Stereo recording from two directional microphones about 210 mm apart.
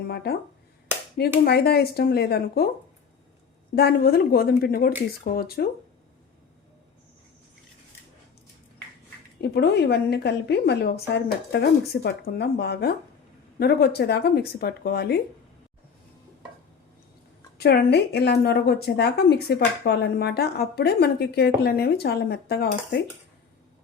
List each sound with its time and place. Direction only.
0.1 s speech: 50° left (ahead or behind)
1.5 s speech: 50° left (ahead or behind)
3.8 s speech: 45° left (ahead or behind)
9.4 s speech: 50° left (ahead or behind)
17.6 s speech: 50° left (ahead or behind)